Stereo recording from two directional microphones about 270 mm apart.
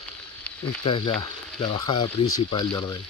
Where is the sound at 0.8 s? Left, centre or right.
Centre.